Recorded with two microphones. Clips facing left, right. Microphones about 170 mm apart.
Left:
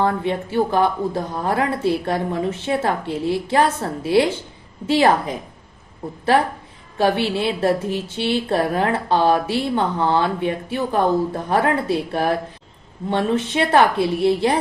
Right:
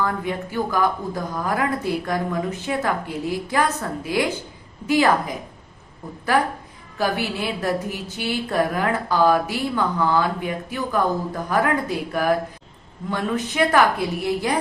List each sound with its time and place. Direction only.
0.0 s speech: 30° left (ahead or behind)
7.0 s speech: 30° left (ahead or behind)